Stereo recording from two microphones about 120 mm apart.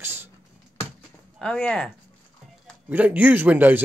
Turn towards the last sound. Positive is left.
turn(degrees=-15)  # may be behind; listen again after turning